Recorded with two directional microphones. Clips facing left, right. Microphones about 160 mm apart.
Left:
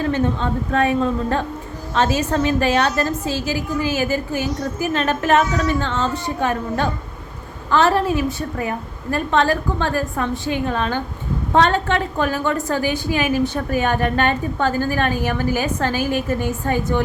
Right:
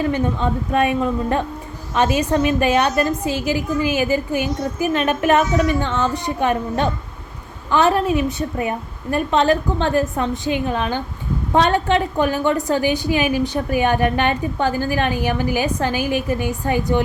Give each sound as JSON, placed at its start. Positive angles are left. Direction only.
{"t": 0.7, "sound": "a woman's voice", "side_deg": -15}